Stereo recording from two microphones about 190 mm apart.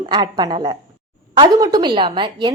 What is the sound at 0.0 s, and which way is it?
A woman's voice, 20° right (ahead or behind).